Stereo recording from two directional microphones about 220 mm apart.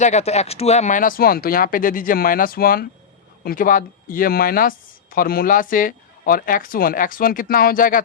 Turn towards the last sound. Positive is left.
turn(degrees=40)  # may be behind; listen again after turning